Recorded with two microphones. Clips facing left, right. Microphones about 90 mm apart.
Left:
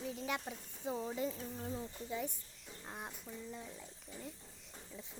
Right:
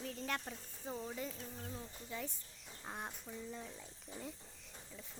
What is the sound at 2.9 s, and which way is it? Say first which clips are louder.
Speech: right 1 dB; centre (ahead or behind).